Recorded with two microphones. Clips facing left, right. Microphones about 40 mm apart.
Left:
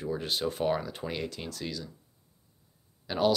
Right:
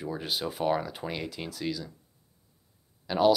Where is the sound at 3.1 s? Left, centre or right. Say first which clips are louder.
Right 4 dB; centre.